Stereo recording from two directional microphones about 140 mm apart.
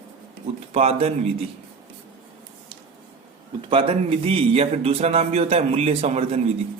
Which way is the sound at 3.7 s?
40° right (ahead or behind).